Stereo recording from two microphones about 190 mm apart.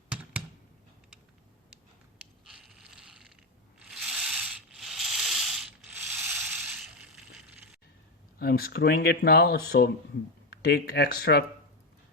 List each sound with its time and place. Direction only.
2.5 s mechanisms: centre (ahead or behind)
3.8 s a sound: centre (ahead or behind)
8.4 s speech: 55° left (ahead or behind)